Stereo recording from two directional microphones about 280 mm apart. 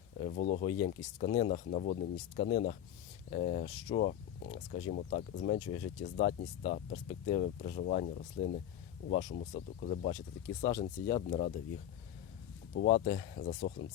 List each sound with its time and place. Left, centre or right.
0.2 s speech: left
5.5 s speech: left
6.0 s speech: left
12.7 s speech: left